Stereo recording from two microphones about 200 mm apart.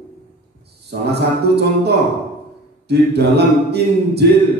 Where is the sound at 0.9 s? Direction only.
55° right (ahead or behind).